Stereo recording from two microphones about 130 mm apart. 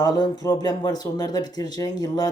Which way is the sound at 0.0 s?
30° left (ahead or behind).